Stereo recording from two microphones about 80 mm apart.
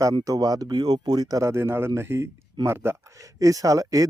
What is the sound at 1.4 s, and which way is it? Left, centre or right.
Speech, right.